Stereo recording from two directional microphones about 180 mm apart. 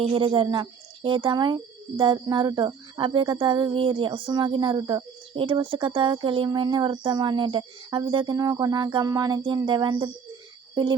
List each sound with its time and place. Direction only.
0.0 s speech: 30° right (ahead or behind)